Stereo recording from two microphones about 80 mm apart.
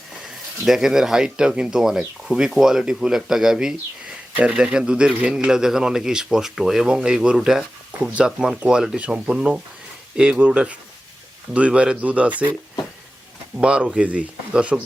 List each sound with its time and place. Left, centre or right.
0.6 s a man's voice: centre
13.6 s a man's voice: centre